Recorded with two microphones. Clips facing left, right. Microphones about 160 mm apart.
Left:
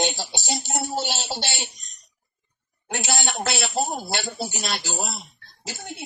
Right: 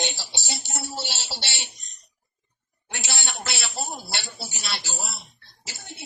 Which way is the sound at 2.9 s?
50° left (ahead or behind).